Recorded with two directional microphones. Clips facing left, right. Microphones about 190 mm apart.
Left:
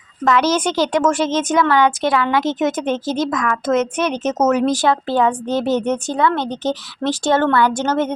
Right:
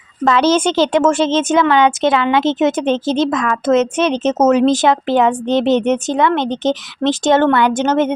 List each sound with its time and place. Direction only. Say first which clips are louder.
0.3 s a woman's voice: right 3 dB; 30° right (ahead or behind)